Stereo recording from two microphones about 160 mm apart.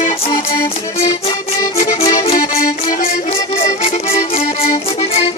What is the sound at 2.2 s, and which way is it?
Accordion, 45° left (ahead or behind).